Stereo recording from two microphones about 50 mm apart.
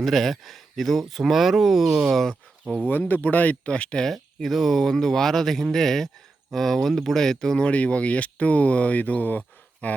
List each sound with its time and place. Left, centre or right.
0.0 s speech: centre
3.1 s speech: left
4.0 s speech: centre
7.7 s speech: left